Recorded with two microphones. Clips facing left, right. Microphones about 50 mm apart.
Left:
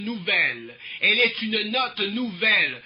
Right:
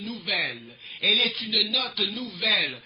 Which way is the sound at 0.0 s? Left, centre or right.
Left.